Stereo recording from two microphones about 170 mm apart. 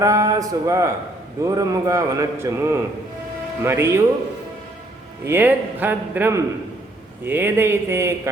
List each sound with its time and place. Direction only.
0.0 s a man's voice: 20° right (ahead or behind)
5.2 s a man's voice: 10° right (ahead or behind)